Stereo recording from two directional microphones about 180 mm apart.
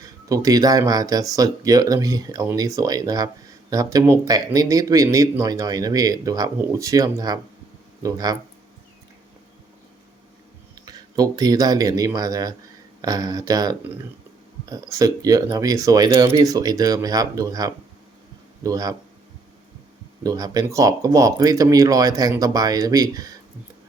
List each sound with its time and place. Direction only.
0.0 s speech: 20° right (ahead or behind)
10.8 s speech: 20° right (ahead or behind)
20.2 s speech: 20° right (ahead or behind)